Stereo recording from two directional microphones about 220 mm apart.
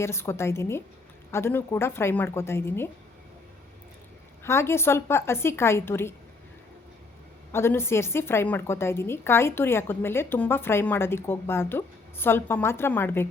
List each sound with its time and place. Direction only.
0.0 s a woman's voice: 10° left (ahead or behind)
4.4 s a woman's voice: 10° left (ahead or behind)
7.5 s a woman's voice: 10° left (ahead or behind)